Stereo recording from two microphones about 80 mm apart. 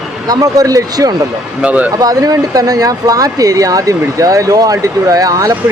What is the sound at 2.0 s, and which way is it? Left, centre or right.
Speech, right.